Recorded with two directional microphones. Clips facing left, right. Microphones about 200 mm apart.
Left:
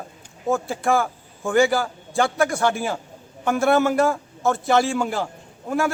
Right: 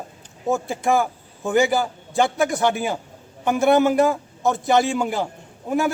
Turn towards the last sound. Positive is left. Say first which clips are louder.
# right 1 dB
turn(degrees=-20)  # may be behind; listen again after turning